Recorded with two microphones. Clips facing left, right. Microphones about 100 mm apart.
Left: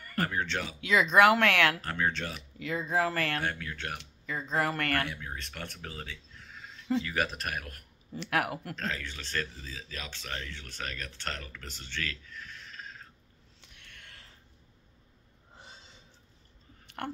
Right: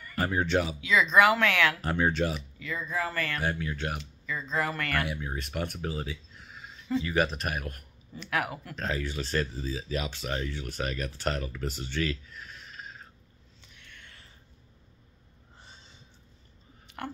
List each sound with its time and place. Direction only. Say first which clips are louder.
0.1 s speech: right 5 dB; 15° right (ahead or behind)
0.7 s speech: left 2 dB; 60° left (ahead or behind)
1.8 s speech: right 5 dB; 15° right (ahead or behind)
2.6 s speech: left 4 dB; 75° left (ahead or behind)
3.3 s speech: right 3 dB; 10° right (ahead or behind)
4.0 s speech: right 1 dB; 55° left (ahead or behind)
5.0 s speech: right 4 dB; 15° right (ahead or behind)
8.2 s speech: left 1 dB; 60° left (ahead or behind)
8.7 s speech: right 5 dB; 15° right (ahead or behind)
13.7 s a sound: right 1 dB; 65° left (ahead or behind)